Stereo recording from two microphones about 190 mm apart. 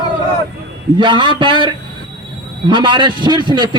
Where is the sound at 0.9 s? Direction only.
25° right (ahead or behind).